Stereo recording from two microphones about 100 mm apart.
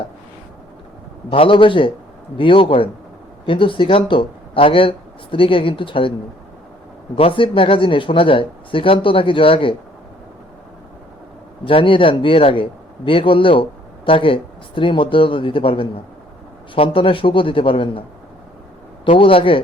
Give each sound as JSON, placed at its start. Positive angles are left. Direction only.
{"t": 1.3, "sound": "speech", "side_deg": 60}
{"t": 7.2, "sound": "speech", "side_deg": 65}
{"t": 11.6, "sound": "a man's voice", "side_deg": 60}
{"t": 19.0, "sound": "speech", "side_deg": 65}